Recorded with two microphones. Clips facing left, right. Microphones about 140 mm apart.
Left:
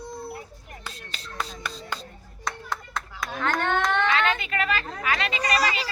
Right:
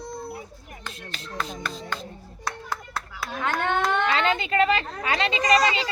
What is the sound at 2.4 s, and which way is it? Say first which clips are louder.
Clapping: even; 5° right (ahead or behind).